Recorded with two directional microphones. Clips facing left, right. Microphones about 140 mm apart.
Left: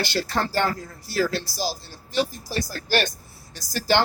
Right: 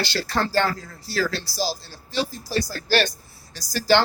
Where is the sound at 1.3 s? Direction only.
50° left (ahead or behind).